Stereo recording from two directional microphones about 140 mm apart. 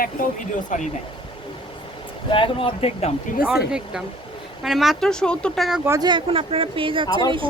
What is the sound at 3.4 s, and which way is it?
Speech, 5° right (ahead or behind).